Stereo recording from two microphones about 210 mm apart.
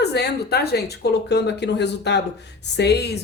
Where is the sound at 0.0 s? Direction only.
50° left (ahead or behind).